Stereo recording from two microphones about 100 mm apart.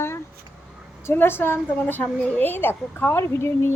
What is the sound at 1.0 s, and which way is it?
A woman's voice, 20° left (ahead or behind).